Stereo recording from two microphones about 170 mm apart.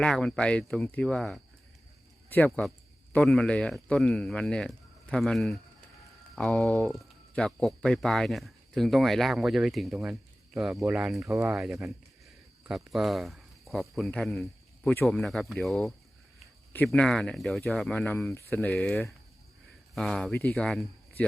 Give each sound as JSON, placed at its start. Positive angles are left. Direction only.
{"t": 0.0, "sound": "speech", "side_deg": 5}
{"t": 2.6, "sound": "speech", "side_deg": 0}
{"t": 11.3, "sound": "speech", "side_deg": -15}
{"t": 12.6, "sound": "speech", "side_deg": 0}